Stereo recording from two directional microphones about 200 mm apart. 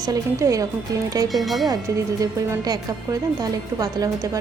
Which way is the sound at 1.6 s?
20° right (ahead or behind).